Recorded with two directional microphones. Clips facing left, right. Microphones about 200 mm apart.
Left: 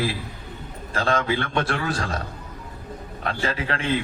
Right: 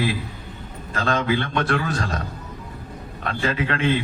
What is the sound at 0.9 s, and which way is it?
Speech, 30° left (ahead or behind).